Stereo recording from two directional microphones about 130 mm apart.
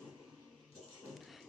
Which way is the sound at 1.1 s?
Centre (ahead or behind).